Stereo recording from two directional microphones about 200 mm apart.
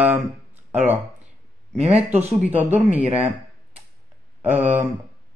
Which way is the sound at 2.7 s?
5° right (ahead or behind).